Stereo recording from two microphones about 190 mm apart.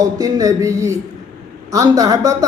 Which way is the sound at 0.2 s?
20° right (ahead or behind).